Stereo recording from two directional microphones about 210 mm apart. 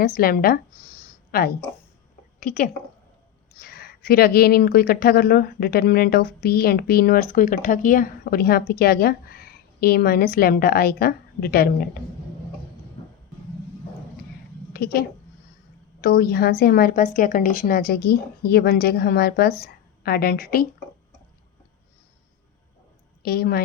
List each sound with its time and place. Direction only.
0.0 s a woman's voice: 45° left (ahead or behind)
14.7 s a sound: 45° left (ahead or behind)
16.0 s speech: 50° left (ahead or behind)
23.2 s speech: 50° left (ahead or behind)